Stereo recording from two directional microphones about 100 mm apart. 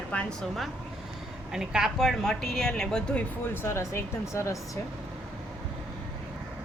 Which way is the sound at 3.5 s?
25° left (ahead or behind).